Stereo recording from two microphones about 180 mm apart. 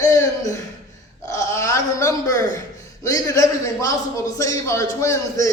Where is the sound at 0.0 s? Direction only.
15° left (ahead or behind).